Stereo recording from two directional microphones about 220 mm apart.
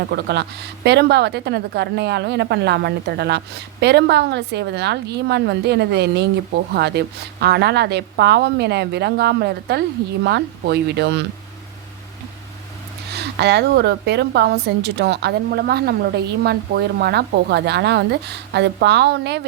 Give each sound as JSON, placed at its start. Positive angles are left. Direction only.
{"t": 0.1, "sound": "a woman's voice", "side_deg": -50}
{"t": 13.1, "sound": "a woman's voice", "side_deg": -50}